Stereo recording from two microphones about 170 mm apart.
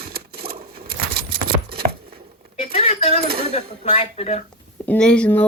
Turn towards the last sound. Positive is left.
turn(degrees=5)  # may be behind; listen again after turning